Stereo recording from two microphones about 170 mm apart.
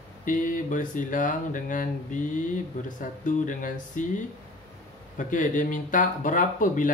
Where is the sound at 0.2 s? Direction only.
50° left (ahead or behind).